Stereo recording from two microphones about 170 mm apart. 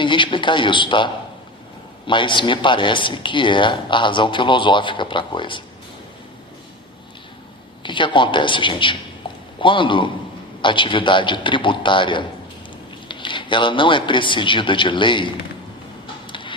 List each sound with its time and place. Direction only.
0.0 s a sound: 30° left (ahead or behind)
2.0 s speech: 30° left (ahead or behind)
7.8 s a man's voice: 30° left (ahead or behind)
16.3 s music: 30° left (ahead or behind)